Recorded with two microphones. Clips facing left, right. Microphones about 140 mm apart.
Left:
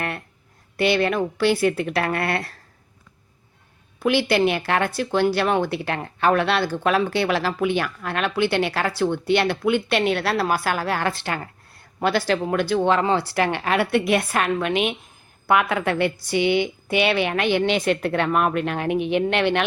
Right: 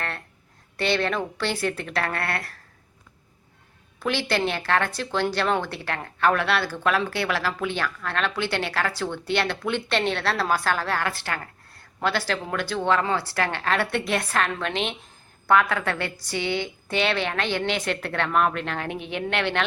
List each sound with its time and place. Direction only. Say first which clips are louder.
0.8 s a woman's voice: left 5 dB; 10° left (ahead or behind)
4.0 s a woman's voice: left 6 dB; 15° left (ahead or behind)